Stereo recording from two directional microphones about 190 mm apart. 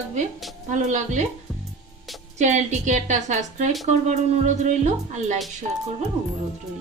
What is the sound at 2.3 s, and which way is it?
Speech, 40° right (ahead or behind).